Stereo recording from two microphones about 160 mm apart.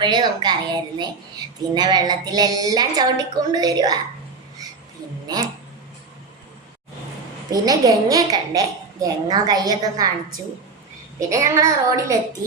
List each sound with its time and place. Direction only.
0.0 s a child's voice: 30° right (ahead or behind)
7.5 s a child's voice: 25° right (ahead or behind)
11.2 s a child's voice: 20° right (ahead or behind)